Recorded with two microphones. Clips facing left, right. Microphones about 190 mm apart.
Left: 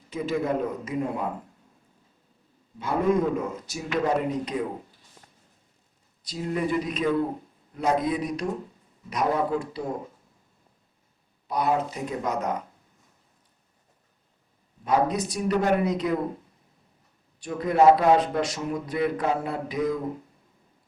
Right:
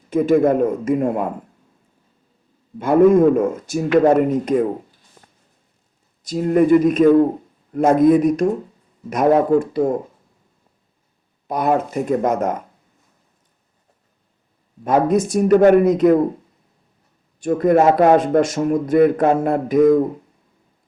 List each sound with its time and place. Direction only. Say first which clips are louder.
0.1 s a man's voice: right 12 dB; 50° right (ahead or behind)
2.7 s a man's voice: right 11 dB; 50° right (ahead or behind)
5.2 s a sound: right 4 dB; 50° right (ahead or behind)
6.2 s a man's voice: right 13 dB; 50° right (ahead or behind)
11.4 s a man's voice: right 6 dB; 50° right (ahead or behind)
14.8 s a man's voice: right 8 dB; 50° right (ahead or behind)
17.4 s a man's voice: right 5 dB; 50° right (ahead or behind)